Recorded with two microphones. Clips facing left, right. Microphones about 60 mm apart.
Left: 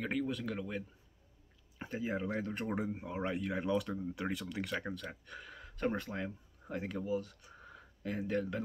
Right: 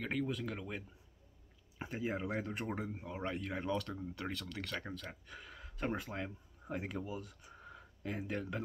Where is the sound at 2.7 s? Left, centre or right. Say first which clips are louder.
Left 4 dB; centre.